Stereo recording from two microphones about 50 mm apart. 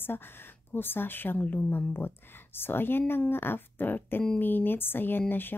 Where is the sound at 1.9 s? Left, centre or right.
Left.